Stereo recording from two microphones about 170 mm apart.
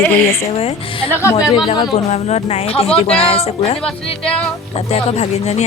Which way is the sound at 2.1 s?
40° left (ahead or behind).